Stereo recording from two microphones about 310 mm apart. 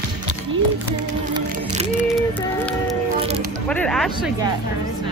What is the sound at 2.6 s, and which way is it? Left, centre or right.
Speech, centre.